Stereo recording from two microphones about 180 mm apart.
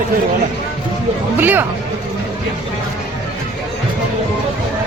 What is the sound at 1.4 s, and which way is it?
Speech, 10° right (ahead or behind).